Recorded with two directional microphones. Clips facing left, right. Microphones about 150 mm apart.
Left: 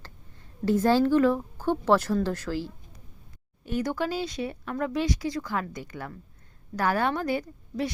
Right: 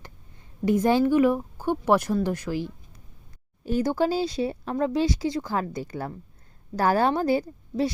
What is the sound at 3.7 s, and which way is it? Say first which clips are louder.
Speech: right 5 dB; 30° right (ahead or behind).